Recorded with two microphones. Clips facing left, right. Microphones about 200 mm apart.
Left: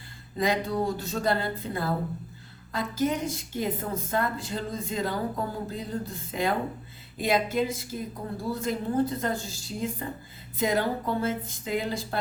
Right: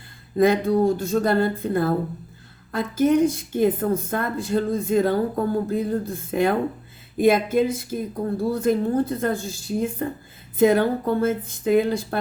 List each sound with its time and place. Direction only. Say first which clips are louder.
0.3 s a woman's voice: right 9 dB; 55° right (ahead or behind)